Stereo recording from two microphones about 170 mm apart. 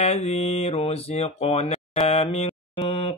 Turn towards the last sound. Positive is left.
turn(degrees=30)  # may be behind; listen again after turning